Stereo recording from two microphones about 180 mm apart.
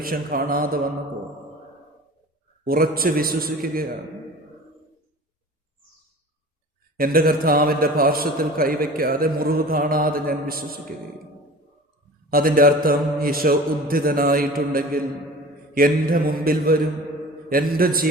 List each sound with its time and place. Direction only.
0.0 s a man's voice: 55° right (ahead or behind)
2.6 s a man's voice: 55° right (ahead or behind)
6.9 s a man's voice: 55° right (ahead or behind)
12.3 s a man's voice: 55° right (ahead or behind)